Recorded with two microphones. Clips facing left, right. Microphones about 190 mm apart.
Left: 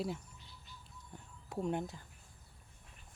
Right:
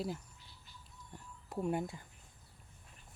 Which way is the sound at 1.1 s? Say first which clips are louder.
Right 1 dB; centre (ahead or behind).